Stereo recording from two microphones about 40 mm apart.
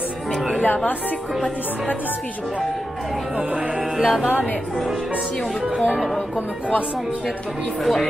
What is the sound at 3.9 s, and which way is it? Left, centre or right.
Music, centre.